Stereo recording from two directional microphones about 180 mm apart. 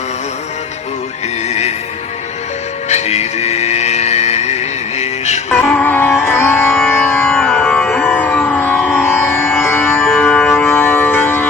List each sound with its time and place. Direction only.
1.5 s music: 35° left (ahead or behind)
2.9 s music: 35° left (ahead or behind)
5.6 s music: 5° left (ahead or behind)